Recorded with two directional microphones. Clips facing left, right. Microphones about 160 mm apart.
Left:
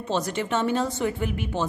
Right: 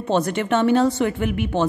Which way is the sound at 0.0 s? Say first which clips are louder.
Right 6 dB; 60° right (ahead or behind).